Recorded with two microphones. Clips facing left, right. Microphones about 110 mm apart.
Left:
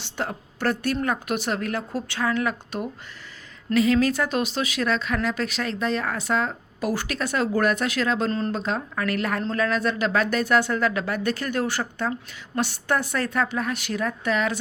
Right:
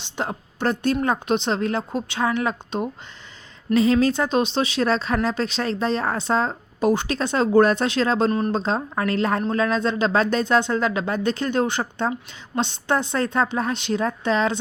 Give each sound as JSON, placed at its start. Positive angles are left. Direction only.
{"t": 0.0, "sound": "a woman's voice", "side_deg": -20}
{"t": 8.3, "sound": "speech", "side_deg": -15}
{"t": 8.5, "sound": "speech", "side_deg": -30}